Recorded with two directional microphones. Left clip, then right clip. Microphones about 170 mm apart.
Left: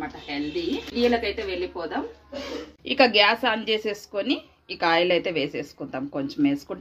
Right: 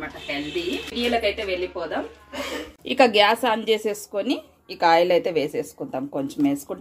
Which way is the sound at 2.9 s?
10° right (ahead or behind).